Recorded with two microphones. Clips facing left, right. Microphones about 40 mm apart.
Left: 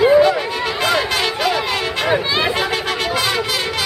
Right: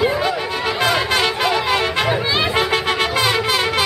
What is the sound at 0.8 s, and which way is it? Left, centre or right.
Music, centre.